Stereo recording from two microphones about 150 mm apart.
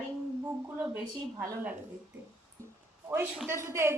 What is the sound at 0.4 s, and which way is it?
A woman's voice, 15° right (ahead or behind).